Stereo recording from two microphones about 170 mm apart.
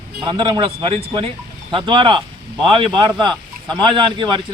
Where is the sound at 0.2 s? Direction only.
25° right (ahead or behind).